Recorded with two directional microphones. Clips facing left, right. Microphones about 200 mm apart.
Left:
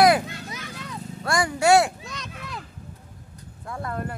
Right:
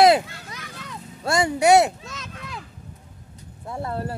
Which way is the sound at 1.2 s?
25° right (ahead or behind).